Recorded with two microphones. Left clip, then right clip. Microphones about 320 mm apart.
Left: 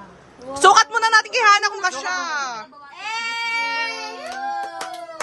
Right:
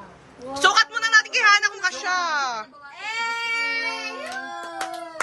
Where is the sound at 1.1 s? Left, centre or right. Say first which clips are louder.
Left 1 dB; centre.